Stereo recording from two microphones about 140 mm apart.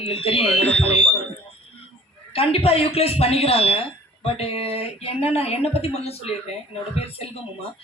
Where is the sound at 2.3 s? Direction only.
45° left (ahead or behind).